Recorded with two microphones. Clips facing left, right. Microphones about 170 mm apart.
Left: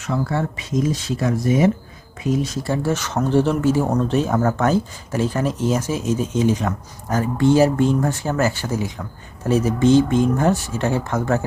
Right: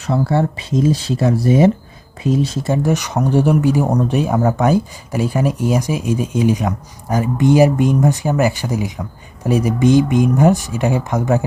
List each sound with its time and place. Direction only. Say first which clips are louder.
0.0 s speech: right 5 dB; 30° right (ahead or behind); by 11.4 s 15° right (ahead or behind)